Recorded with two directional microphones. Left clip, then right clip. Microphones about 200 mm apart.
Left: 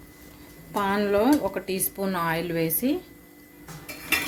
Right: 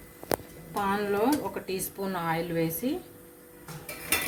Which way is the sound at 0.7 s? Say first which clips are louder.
Left 5 dB; 50° left (ahead or behind).